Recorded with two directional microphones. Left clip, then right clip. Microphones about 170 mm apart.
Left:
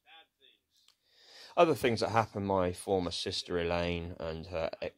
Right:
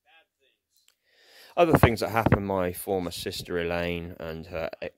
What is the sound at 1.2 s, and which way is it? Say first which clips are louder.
Speech: right 4 dB; 45° right (ahead or behind).